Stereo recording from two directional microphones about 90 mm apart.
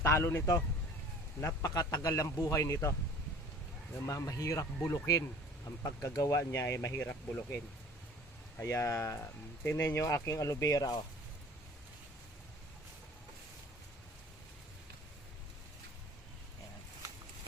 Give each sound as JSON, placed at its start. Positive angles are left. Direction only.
{"t": 0.0, "sound": "a man's voice", "side_deg": 30}
{"t": 4.0, "sound": "speech", "side_deg": 35}
{"t": 8.6, "sound": "speech", "side_deg": 35}